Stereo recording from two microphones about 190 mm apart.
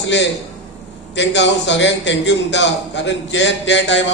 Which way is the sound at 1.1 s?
70° left (ahead or behind).